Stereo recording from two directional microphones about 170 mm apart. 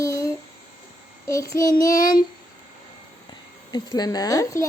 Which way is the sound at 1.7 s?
55° left (ahead or behind).